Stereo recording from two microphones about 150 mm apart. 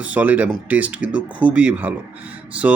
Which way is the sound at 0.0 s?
10° right (ahead or behind).